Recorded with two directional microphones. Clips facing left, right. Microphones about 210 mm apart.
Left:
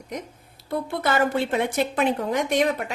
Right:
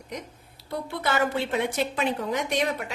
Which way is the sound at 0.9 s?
50° left (ahead or behind).